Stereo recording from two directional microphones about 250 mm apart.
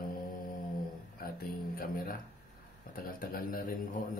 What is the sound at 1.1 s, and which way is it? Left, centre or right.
Speech, left.